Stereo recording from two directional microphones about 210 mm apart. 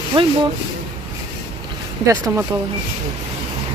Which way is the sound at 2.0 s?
10° right (ahead or behind).